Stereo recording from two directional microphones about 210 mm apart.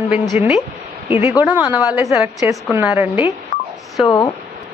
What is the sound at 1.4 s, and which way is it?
A woman's voice, 10° right (ahead or behind).